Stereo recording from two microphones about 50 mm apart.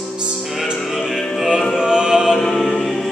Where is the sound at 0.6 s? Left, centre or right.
Centre.